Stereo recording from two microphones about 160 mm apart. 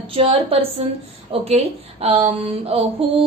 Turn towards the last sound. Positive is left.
turn(degrees=-35)  # may be behind; listen again after turning